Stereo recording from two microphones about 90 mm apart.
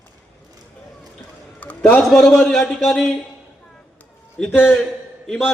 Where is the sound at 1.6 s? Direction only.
15° left (ahead or behind).